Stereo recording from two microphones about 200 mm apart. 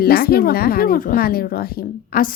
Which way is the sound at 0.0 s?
50° left (ahead or behind).